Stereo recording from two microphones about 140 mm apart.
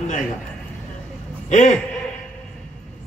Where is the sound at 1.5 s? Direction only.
55° left (ahead or behind).